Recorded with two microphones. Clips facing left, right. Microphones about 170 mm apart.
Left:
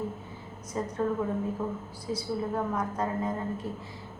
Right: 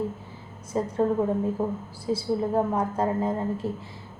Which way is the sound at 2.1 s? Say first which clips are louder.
Right 6 dB; 30° right (ahead or behind).